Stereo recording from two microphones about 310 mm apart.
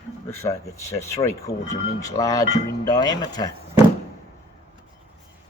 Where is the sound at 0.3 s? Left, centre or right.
Centre.